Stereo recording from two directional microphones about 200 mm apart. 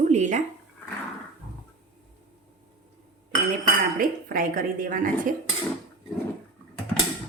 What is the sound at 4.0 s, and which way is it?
Speech, 45° right (ahead or behind).